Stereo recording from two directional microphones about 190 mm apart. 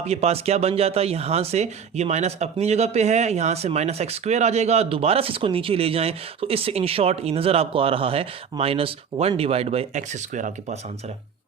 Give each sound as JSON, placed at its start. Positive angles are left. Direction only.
{"t": 0.0, "sound": "speech", "side_deg": -35}